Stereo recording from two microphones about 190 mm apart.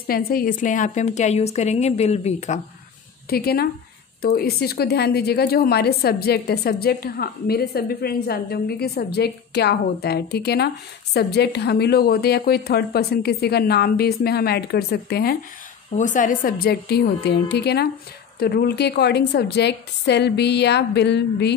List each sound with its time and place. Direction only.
0.0 s a woman's voice: 50° left (ahead or behind); by 2.6 s 35° left (ahead or behind)
3.3 s a woman's voice: 55° left (ahead or behind)
16.0 s a woman's voice: 45° left (ahead or behind); by 21.5 s 65° left (ahead or behind)